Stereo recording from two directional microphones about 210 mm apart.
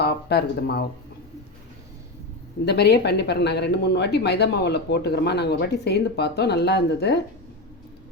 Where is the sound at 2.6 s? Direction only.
50° left (ahead or behind).